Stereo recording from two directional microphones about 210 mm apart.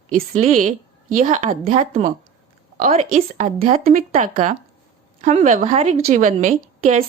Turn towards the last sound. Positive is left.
turn(degrees=-35)  # may be behind; listen again after turning